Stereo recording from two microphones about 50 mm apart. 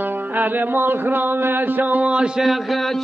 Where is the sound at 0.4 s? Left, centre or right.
Right.